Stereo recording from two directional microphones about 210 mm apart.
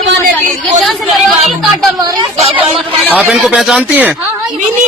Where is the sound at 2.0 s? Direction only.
20° right (ahead or behind).